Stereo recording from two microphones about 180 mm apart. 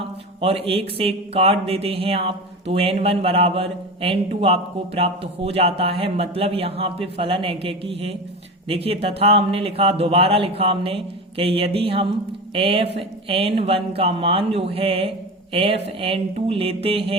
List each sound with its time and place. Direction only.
0.4 s speech: 30° right (ahead or behind)